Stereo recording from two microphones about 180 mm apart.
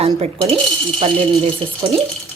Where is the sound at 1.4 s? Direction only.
30° right (ahead or behind).